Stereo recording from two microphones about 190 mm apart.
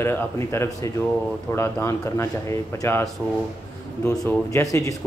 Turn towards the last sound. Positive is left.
turn(degrees=20)  # may be behind; listen again after turning